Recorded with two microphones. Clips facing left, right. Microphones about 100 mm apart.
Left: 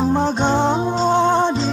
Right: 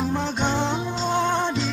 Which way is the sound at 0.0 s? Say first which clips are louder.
Left 7 dB; 35° left (ahead or behind).